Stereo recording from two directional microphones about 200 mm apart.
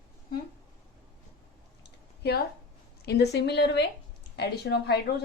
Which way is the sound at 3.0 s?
55° left (ahead or behind).